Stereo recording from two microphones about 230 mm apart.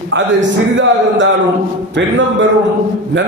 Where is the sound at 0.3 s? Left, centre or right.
Right.